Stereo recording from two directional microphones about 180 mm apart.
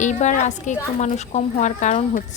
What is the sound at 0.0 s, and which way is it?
A woman's voice, 40° left (ahead or behind).